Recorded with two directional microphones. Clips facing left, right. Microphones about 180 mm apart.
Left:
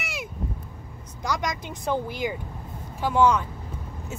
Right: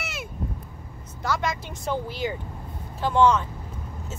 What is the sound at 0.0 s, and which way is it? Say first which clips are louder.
Vehicle: left 1 dB; 10° left (ahead or behind).